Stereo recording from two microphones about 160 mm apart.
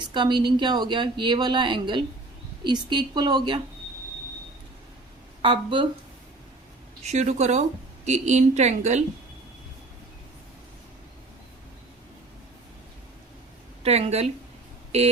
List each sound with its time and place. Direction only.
0.0 s speech: 30° right (ahead or behind)
5.4 s speech: 30° right (ahead or behind)
7.0 s a woman's voice: 45° right (ahead or behind)
13.8 s speech: 40° right (ahead or behind)